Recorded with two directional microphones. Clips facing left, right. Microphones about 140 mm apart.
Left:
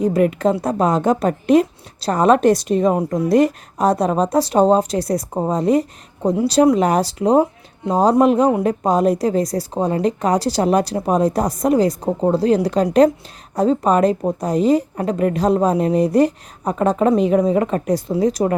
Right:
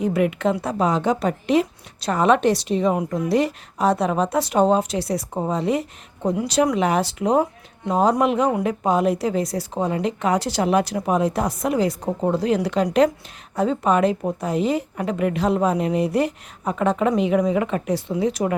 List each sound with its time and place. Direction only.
0.0 s a woman's voice: 40° left (ahead or behind)